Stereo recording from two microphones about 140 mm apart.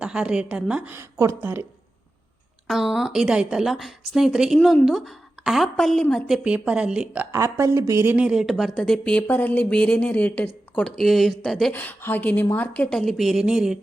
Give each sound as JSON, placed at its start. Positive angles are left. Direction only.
{"t": 0.0, "sound": "a woman's voice", "side_deg": -5}
{"t": 2.6, "sound": "a woman's voice", "side_deg": 0}
{"t": 7.3, "sound": "a woman's voice", "side_deg": -20}
{"t": 11.7, "sound": "a woman's voice", "side_deg": 10}